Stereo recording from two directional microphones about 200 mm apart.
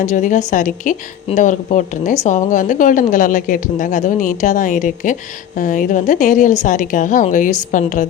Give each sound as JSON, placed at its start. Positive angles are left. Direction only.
{"t": 0.0, "sound": "speech", "side_deg": 40}